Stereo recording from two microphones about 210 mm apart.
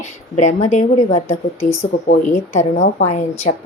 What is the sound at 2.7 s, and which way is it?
Speech, 35° left (ahead or behind).